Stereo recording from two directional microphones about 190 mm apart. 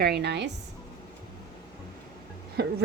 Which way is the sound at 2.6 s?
60° right (ahead or behind).